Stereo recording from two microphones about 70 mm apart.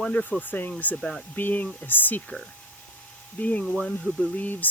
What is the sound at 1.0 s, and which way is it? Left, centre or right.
Speech, centre.